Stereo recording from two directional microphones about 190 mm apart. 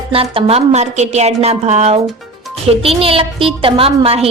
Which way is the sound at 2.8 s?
30° right (ahead or behind).